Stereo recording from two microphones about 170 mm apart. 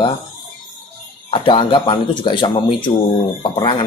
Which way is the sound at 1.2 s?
30° left (ahead or behind).